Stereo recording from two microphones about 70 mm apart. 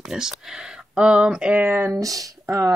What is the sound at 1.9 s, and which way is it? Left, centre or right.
Speech, right.